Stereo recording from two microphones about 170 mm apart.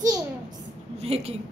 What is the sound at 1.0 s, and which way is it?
Speech, 35° right (ahead or behind).